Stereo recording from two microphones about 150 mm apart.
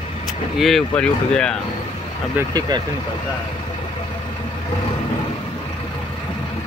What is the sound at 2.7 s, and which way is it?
Speech, 30° right (ahead or behind).